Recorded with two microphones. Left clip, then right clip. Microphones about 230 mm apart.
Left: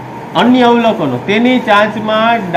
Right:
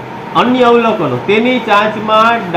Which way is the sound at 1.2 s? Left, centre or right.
Left.